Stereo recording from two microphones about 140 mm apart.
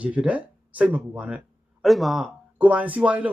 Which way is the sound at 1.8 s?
Centre (ahead or behind).